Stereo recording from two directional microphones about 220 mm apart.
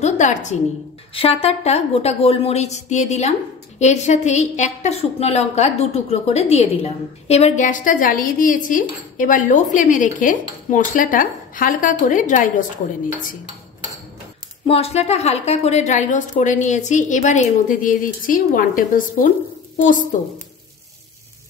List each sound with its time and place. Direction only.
0.0 s a woman's voice: 35° left (ahead or behind)
14.7 s a woman's voice: 25° left (ahead or behind)